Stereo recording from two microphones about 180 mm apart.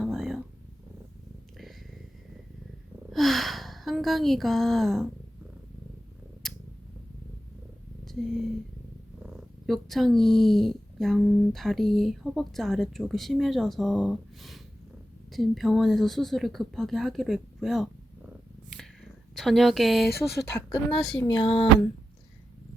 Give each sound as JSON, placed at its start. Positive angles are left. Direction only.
{"t": 0.0, "sound": "purr", "side_deg": 0}
{"t": 3.1, "sound": "a sound", "side_deg": 0}
{"t": 8.0, "sound": "speech", "side_deg": 0}
{"t": 19.3, "sound": "speech", "side_deg": 0}
{"t": 21.2, "sound": "speech", "side_deg": 25}